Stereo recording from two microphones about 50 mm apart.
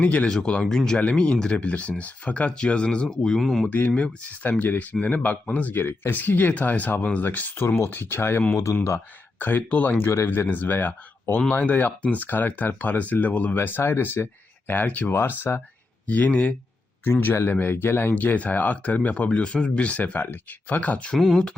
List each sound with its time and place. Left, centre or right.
0.0 s speech: left
0.3 s speech: centre
3.1 s speech: centre
3.7 s speech: left
5.7 s speech: left
9.4 s speech: left
10.2 s speech: left
13.6 s speech: left
15.1 s speech: left
16.0 s speech: left
17.0 s speech: left
18.1 s speech: left
21.2 s speech: centre